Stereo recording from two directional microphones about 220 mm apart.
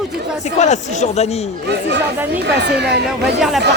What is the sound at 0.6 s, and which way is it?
Speech, 30° left (ahead or behind).